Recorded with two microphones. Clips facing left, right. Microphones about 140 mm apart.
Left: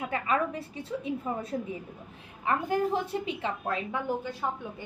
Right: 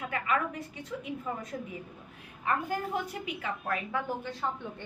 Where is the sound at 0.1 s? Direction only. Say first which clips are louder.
Left 2 dB; 30° left (ahead or behind).